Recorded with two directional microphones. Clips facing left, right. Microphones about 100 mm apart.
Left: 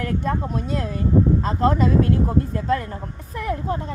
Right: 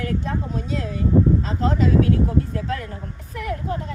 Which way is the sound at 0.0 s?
55° left (ahead or behind).